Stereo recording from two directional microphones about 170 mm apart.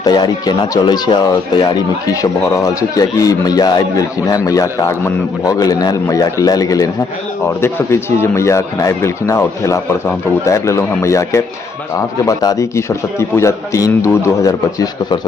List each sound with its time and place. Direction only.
0.0 s a man's voice: 25° left (ahead or behind)